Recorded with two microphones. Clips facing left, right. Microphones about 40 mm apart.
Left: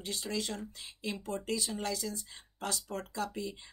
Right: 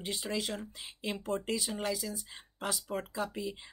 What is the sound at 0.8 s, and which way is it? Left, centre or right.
Speech, right.